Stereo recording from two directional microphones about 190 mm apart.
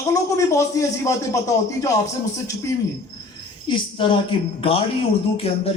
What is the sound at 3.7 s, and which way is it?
Speech, 25° left (ahead or behind).